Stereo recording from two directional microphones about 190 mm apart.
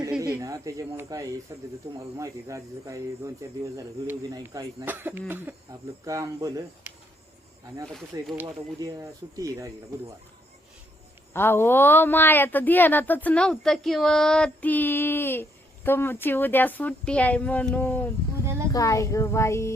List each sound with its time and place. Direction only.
0.2 s speech: 15° right (ahead or behind)
8.4 s speech: 15° right (ahead or behind)
11.3 s speech: 10° left (ahead or behind)
18.4 s a woman's voice: 15° right (ahead or behind)
18.7 s speech: 15° left (ahead or behind)